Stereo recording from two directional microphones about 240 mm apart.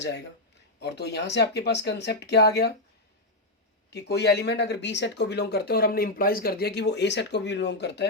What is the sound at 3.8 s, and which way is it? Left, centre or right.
Speech, left.